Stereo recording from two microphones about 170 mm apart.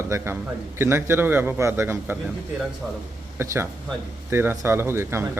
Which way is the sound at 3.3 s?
15° right (ahead or behind).